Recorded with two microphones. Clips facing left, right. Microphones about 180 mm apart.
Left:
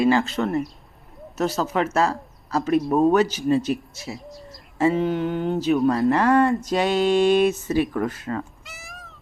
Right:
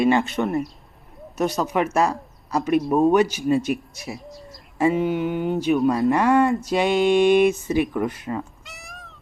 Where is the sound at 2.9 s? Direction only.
10° right (ahead or behind).